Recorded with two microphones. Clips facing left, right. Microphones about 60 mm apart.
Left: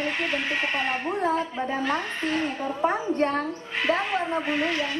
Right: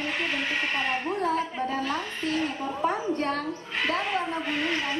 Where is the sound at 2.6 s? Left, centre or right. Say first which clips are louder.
Left 2 dB; left.